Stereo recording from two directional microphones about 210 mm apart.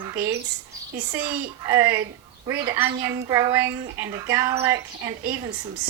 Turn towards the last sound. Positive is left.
turn(degrees=-10)  # may be behind; listen again after turning